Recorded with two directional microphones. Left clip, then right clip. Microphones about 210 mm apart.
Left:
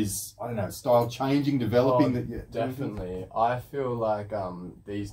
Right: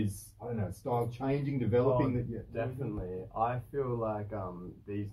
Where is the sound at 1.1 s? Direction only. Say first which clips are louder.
Left 8 dB; 55° left (ahead or behind).